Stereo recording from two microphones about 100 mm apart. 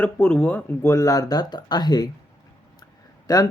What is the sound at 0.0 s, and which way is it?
Speech, 15° left (ahead or behind).